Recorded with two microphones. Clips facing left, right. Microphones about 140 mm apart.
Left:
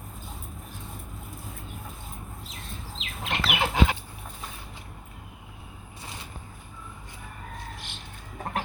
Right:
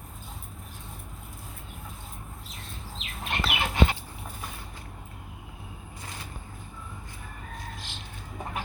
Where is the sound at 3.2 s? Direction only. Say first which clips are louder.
Left 2 dB; 90° left.